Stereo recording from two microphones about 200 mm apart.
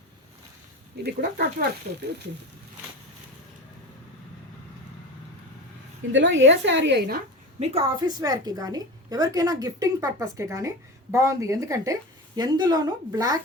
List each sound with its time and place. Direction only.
1.0 s speech: 55° right (ahead or behind)
6.1 s a woman's voice: 65° right (ahead or behind)
7.6 s a woman's voice: 30° right (ahead or behind)